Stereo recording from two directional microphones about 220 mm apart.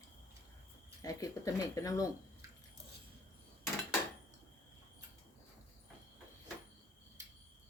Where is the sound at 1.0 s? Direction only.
15° left (ahead or behind).